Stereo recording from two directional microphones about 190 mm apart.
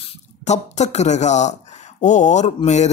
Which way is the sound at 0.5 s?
35° left (ahead or behind).